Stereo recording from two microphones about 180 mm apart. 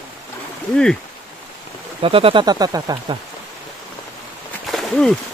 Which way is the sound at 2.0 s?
30° right (ahead or behind).